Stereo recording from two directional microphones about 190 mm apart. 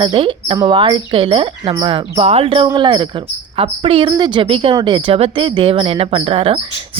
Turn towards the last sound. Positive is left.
turn(degrees=-30)  # may be behind; listen again after turning